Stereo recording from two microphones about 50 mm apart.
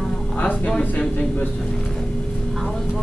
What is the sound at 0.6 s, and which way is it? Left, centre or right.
Speech, centre.